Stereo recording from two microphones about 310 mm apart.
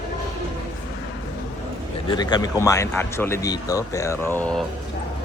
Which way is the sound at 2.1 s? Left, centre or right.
Centre.